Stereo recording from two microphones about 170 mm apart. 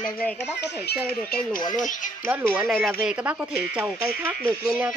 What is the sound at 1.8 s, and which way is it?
Speech, 50° left (ahead or behind).